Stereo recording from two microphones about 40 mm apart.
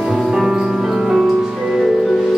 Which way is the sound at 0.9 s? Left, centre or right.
Centre.